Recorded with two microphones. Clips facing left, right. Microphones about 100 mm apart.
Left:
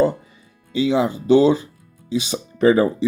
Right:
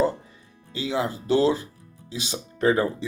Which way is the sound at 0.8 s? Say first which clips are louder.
Left 8 dB; 75° left (ahead or behind).